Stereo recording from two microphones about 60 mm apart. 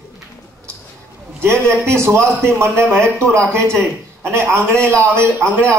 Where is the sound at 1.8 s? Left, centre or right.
Right.